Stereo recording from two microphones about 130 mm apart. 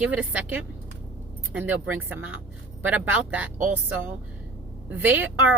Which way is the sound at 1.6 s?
15° right (ahead or behind).